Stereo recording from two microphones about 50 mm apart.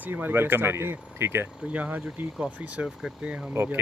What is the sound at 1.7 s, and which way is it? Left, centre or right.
Speech, right.